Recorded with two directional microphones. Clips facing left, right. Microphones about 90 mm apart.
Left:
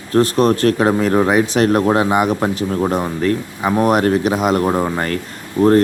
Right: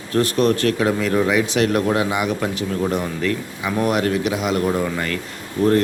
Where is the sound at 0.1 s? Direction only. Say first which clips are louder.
Left 4 dB; 35° left (ahead or behind).